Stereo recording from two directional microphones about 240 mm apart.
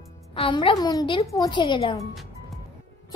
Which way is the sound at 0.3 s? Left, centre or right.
Left.